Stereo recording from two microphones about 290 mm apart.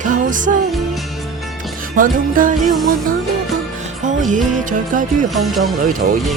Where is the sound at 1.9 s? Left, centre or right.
Right.